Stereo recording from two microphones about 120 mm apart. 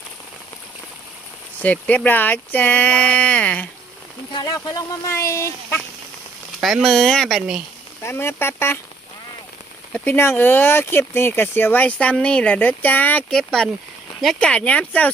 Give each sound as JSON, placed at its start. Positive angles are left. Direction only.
{"t": 1.5, "sound": "speech", "side_deg": 15}
{"t": 4.3, "sound": "speech", "side_deg": 35}
{"t": 6.6, "sound": "speech", "side_deg": 0}
{"t": 8.0, "sound": "speech", "side_deg": 20}
{"t": 9.9, "sound": "speech", "side_deg": 15}
{"t": 14.2, "sound": "speech", "side_deg": 5}